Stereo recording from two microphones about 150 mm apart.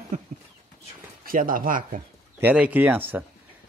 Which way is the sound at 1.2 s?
65° right (ahead or behind).